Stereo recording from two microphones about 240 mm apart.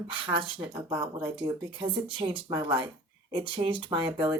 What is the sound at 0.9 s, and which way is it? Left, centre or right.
Speech, centre.